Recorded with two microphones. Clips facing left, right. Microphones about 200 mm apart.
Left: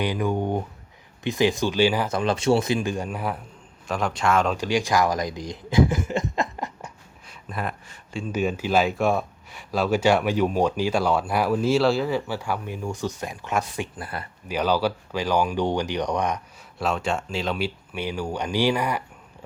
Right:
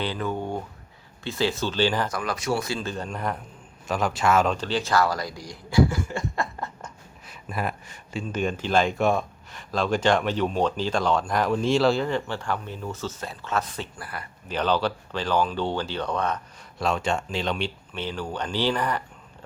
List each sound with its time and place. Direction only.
0.0 s speech: 15° left (ahead or behind)
2.0 s a man's voice: 25° left (ahead or behind); by 4.5 s 5° right (ahead or behind)
4.5 s speech: 10° left (ahead or behind)
7.5 s speech: 5° right (ahead or behind)
8.3 s speech: 10° left (ahead or behind); by 14.3 s 25° left (ahead or behind)
14.4 s speech: 10° left (ahead or behind)
16.7 s speech: centre (ahead or behind)